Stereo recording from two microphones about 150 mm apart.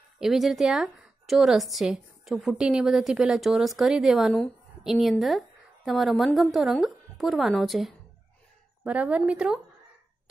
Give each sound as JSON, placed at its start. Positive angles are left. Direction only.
{"t": 0.2, "sound": "a woman's voice", "side_deg": 0}